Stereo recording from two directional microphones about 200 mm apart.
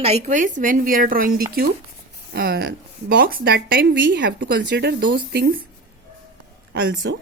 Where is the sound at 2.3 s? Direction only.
50° right (ahead or behind).